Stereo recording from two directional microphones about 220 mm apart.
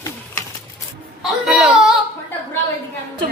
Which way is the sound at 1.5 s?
Centre (ahead or behind).